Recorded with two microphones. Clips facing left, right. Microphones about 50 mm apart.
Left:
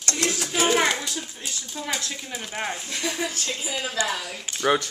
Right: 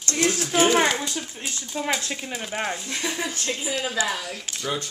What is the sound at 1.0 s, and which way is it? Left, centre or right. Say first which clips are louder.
Speech: right 2 dB; right.